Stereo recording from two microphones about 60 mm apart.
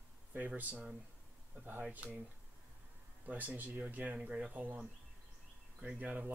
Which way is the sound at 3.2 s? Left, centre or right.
Right.